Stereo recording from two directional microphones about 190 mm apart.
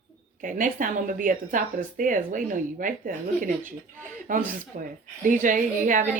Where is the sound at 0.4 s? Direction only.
45° right (ahead or behind).